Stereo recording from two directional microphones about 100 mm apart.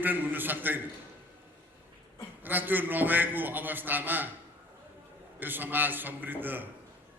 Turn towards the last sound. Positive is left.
turn(degrees=-20)  # may be behind; listen again after turning